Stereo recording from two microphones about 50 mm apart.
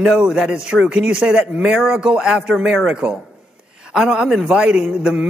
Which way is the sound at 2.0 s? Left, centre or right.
Centre.